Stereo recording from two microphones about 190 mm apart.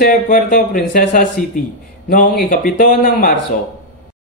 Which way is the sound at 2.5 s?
45° left (ahead or behind).